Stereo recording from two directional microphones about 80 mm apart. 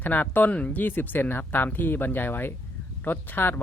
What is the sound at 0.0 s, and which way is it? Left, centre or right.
Speech, left.